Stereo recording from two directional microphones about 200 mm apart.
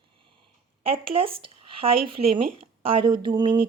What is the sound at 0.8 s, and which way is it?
Speech, 25° right (ahead or behind).